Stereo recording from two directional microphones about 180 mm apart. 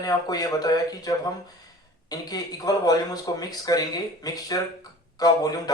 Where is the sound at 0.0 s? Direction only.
20° left (ahead or behind).